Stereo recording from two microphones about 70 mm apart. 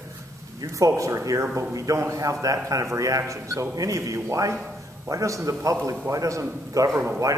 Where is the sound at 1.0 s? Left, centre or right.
Right.